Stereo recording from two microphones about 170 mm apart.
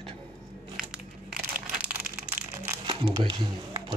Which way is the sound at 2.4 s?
55° right (ahead or behind).